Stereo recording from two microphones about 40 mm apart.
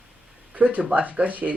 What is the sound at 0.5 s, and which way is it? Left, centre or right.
Speech, right.